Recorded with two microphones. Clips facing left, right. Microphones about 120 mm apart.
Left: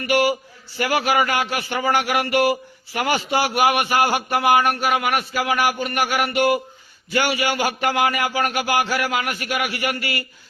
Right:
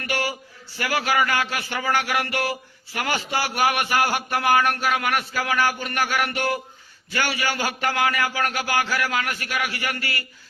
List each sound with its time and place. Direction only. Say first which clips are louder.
0.1 s speech: left 9 dB; 15° left (ahead or behind)